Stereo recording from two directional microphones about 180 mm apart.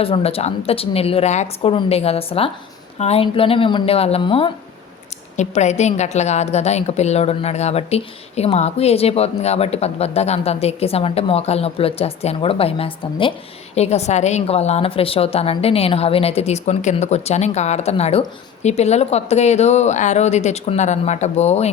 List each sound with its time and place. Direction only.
0.0 s a woman's voice: 30° left (ahead or behind)
5.4 s a woman's voice: 40° left (ahead or behind)